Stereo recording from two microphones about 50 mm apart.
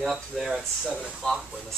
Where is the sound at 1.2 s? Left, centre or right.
Centre.